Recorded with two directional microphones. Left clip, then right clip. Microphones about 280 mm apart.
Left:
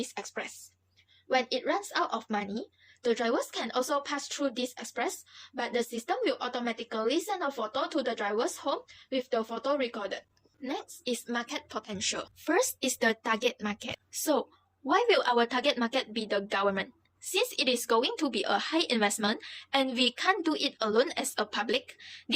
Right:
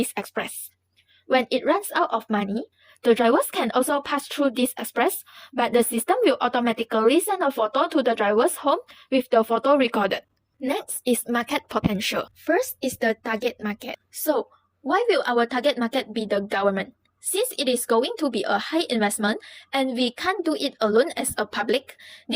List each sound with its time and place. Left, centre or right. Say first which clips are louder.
0.0 s speech: right 9 dB; right
11.0 s a woman's voice: right 9 dB; right
12.5 s speech: right 4 dB; centre